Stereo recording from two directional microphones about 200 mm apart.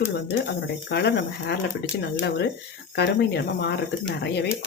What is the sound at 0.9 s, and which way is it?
Speech, 55° left (ahead or behind).